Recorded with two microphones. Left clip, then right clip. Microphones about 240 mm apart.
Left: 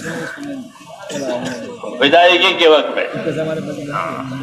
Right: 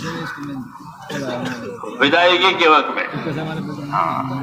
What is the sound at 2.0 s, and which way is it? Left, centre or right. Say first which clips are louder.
A man's voice: left 4 dB; right.